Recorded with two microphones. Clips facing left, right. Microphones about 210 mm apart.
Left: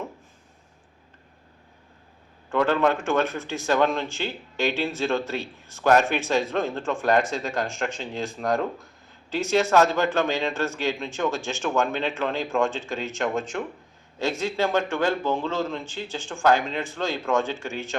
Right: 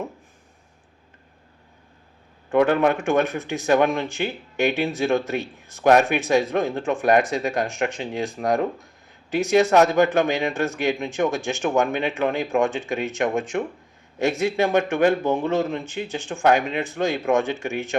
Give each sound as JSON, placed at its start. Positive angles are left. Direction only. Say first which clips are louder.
{"t": 2.6, "sound": "speech", "louder": "right 3 dB", "side_deg": -15}
{"t": 16.5, "sound": "speech", "louder": "right 2 dB", "side_deg": -60}
{"t": 16.7, "sound": "speech", "louder": "right 4 dB", "side_deg": -20}